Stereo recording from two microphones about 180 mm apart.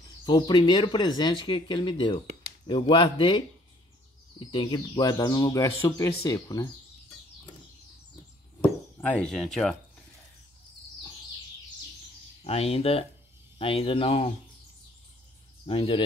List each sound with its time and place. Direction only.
0.2 s speech: 20° left (ahead or behind)
4.5 s speech: 25° left (ahead or behind)
8.5 s speech: 10° left (ahead or behind)
12.4 s speech: 35° left (ahead or behind)
15.6 s speech: 30° left (ahead or behind)